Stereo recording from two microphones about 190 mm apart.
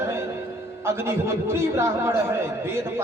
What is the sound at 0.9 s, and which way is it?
Speech, 15° right (ahead or behind).